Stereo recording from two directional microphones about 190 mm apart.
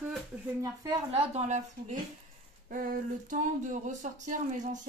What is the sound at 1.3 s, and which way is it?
Speech, 40° right (ahead or behind).